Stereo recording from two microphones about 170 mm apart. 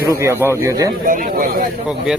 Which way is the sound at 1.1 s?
55° right (ahead or behind).